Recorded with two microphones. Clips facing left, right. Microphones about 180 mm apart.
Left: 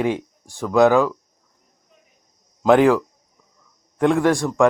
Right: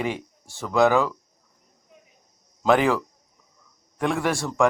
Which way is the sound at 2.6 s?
15° left (ahead or behind).